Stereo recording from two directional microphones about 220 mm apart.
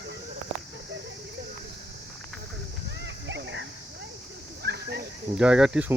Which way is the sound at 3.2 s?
55° right (ahead or behind).